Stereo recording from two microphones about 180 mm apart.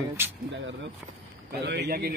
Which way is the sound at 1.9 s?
60° right (ahead or behind).